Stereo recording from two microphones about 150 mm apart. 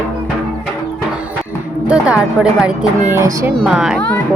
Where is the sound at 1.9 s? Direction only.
5° right (ahead or behind).